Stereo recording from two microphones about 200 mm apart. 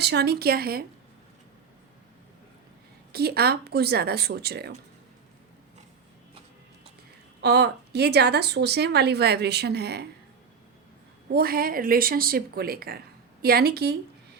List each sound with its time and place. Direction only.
0.0 s speech: 55° right (ahead or behind)
3.1 s speech: 50° right (ahead or behind)
7.4 s speech: 55° right (ahead or behind)
11.3 s speech: 50° right (ahead or behind)